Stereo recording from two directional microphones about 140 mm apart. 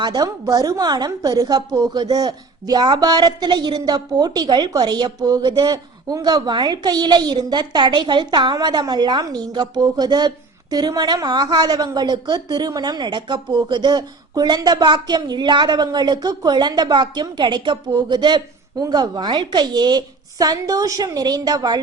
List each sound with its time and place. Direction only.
0.0 s a woman's voice: 30° right (ahead or behind)